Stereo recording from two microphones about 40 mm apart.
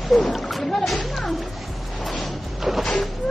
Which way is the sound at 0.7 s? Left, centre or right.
Centre.